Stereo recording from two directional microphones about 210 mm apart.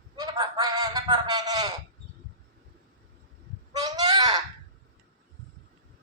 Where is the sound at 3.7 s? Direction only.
20° right (ahead or behind).